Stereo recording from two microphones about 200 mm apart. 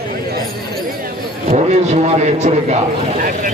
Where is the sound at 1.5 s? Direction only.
35° right (ahead or behind).